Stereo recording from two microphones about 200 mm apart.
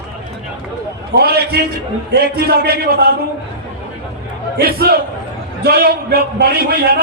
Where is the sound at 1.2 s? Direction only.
50° right (ahead or behind).